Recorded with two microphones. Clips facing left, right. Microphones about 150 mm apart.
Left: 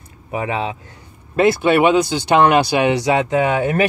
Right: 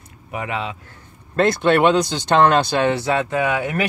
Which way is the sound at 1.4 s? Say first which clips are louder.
Left 2 dB; 5° left (ahead or behind).